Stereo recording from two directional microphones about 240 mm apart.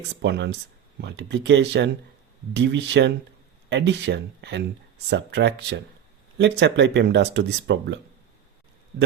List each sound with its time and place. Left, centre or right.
0.2 s speech: right